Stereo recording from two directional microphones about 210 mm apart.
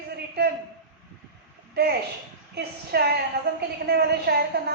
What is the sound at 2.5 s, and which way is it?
A woman's voice, 50° right (ahead or behind).